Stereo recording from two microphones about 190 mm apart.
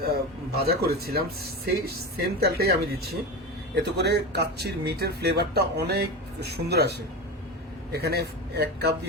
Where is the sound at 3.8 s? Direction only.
60° right (ahead or behind).